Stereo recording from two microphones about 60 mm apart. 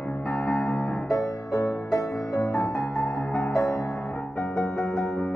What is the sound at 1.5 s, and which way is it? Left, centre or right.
Music, left.